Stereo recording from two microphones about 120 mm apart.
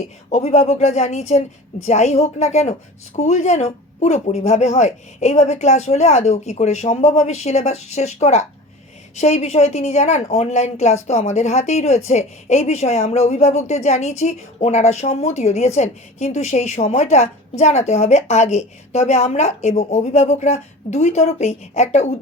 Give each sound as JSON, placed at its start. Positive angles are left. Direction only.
{"t": 0.3, "sound": "speech", "side_deg": 65}
{"t": 3.2, "sound": "speech", "side_deg": 75}